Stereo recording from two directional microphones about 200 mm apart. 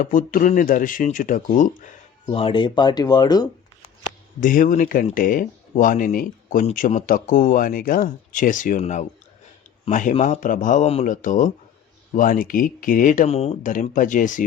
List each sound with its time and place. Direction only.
0.0 s speech: 45° left (ahead or behind)
2.2 s speech: 25° left (ahead or behind)
4.4 s speech: 40° left (ahead or behind)